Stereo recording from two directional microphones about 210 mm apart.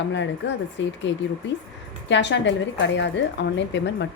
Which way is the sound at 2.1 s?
55° left (ahead or behind).